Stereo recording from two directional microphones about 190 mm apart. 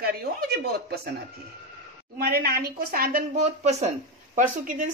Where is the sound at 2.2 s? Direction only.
55° right (ahead or behind).